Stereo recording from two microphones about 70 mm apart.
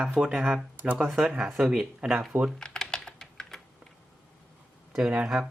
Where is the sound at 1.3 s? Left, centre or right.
Centre.